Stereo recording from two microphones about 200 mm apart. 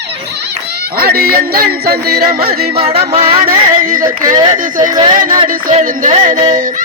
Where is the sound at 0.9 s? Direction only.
50° right (ahead or behind).